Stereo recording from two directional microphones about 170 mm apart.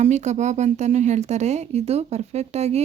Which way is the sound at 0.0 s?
45° right (ahead or behind).